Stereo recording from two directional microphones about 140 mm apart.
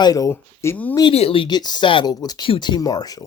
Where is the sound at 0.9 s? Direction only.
30° left (ahead or behind).